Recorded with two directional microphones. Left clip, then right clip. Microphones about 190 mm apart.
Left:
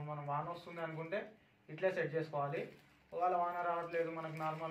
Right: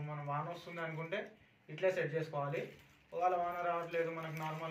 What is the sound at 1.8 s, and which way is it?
Speech, 20° right (ahead or behind).